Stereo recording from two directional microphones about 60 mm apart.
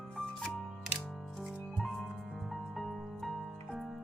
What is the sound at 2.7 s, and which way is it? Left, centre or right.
Music, centre.